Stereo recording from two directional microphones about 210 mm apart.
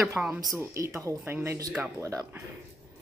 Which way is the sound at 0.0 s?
5° right (ahead or behind).